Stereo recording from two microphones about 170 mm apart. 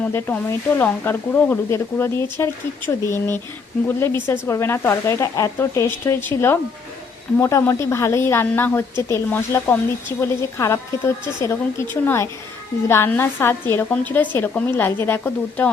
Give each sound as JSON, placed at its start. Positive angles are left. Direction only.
{"t": 0.0, "sound": "a woman's voice", "side_deg": 10}